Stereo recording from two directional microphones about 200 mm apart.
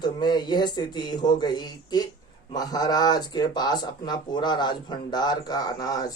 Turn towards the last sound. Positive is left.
turn(degrees=20)  # may be behind; listen again after turning